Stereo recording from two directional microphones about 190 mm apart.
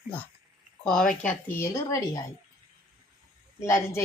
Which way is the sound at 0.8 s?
5° left (ahead or behind).